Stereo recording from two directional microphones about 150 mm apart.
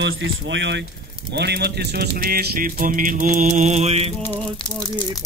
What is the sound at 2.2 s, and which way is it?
Mantra, 80° right.